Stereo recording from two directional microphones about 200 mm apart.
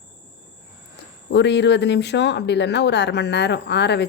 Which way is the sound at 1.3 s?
60° left (ahead or behind).